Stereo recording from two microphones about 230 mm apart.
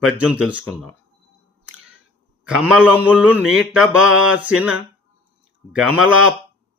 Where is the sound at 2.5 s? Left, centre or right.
Centre.